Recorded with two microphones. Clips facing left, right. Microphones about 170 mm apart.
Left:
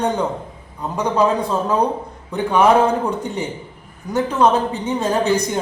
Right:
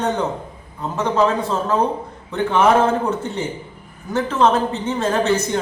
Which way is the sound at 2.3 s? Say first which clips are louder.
Left 1 dB; 15° left (ahead or behind).